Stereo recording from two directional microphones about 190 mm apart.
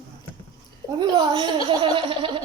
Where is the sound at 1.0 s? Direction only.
25° right (ahead or behind).